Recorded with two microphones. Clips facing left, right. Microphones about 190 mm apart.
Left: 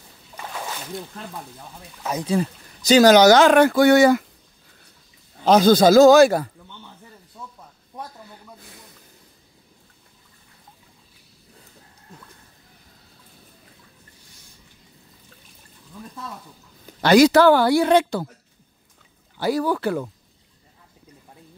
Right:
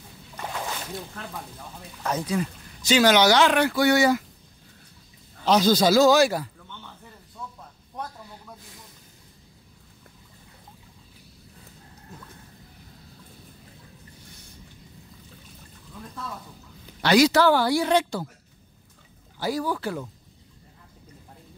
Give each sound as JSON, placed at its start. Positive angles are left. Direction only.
{"t": 2.2, "sound": "speech", "side_deg": 35}
{"t": 5.4, "sound": "speech", "side_deg": 50}
{"t": 17.0, "sound": "speech", "side_deg": 50}
{"t": 19.4, "sound": "speech", "side_deg": 65}